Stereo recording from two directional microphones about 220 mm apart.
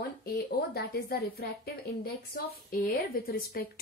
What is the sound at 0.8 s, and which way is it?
A woman's voice, 45° left (ahead or behind).